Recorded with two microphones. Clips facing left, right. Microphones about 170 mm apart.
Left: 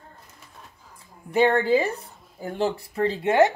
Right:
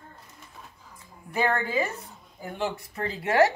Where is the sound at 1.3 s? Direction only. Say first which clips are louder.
Left 7 dB; 30° left (ahead or behind).